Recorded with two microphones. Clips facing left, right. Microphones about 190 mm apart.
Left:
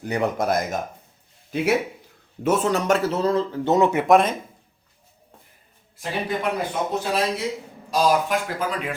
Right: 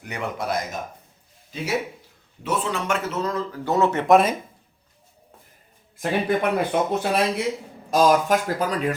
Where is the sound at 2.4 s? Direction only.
45° left (ahead or behind); by 4.0 s 15° left (ahead or behind).